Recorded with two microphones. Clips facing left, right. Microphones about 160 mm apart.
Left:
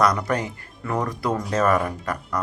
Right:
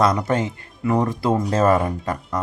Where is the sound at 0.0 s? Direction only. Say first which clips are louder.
Right 2 dB; 25° right (ahead or behind).